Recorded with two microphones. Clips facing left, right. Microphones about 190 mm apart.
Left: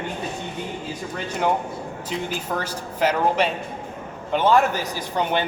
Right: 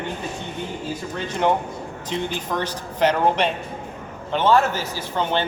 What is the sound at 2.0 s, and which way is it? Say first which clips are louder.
A man's voice: right 2 dB; 5° left (ahead or behind).